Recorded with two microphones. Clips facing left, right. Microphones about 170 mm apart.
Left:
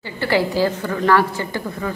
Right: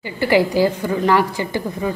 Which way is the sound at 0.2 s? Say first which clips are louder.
Right 3 dB; 15° right (ahead or behind).